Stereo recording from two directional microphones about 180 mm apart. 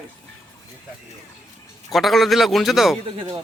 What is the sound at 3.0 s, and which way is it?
Speech, 30° right (ahead or behind).